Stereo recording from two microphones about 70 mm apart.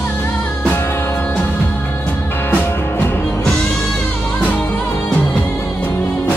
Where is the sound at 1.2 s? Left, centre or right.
Left.